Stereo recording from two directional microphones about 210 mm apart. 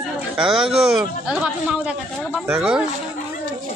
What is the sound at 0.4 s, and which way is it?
Speech, centre (ahead or behind).